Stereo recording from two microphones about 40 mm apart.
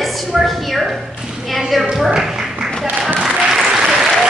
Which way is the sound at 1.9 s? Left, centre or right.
Centre.